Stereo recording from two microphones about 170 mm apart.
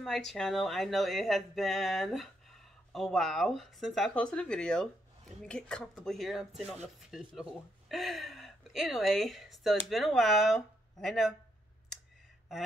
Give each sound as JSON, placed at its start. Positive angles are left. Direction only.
{"t": 0.3, "sound": "speech", "side_deg": 0}